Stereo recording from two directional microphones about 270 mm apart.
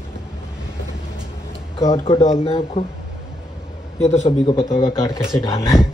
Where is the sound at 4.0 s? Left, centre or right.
Left.